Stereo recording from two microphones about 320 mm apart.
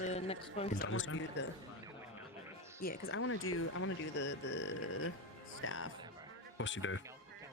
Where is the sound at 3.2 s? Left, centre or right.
Left.